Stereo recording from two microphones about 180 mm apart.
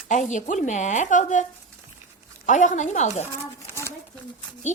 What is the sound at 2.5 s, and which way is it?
Speech, 45° left (ahead or behind).